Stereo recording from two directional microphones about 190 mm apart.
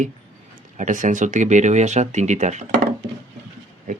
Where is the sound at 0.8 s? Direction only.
40° right (ahead or behind).